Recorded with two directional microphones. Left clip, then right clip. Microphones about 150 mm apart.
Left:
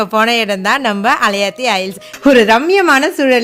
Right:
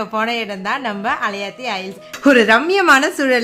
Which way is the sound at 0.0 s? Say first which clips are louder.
Left 7 dB; 50° left (ahead or behind).